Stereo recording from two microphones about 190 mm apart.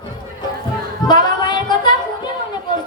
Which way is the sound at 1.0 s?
25° left (ahead or behind).